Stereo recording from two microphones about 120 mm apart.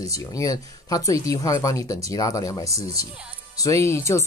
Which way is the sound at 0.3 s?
30° left (ahead or behind).